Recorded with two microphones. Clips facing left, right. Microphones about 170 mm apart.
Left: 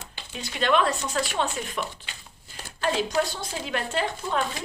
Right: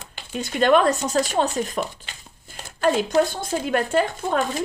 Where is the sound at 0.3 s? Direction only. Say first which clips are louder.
Right 6 dB; 45° right (ahead or behind).